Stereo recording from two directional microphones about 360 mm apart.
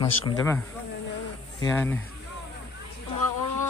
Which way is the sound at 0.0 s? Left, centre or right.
Centre.